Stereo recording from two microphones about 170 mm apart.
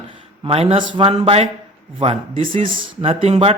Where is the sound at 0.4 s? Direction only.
35° right (ahead or behind).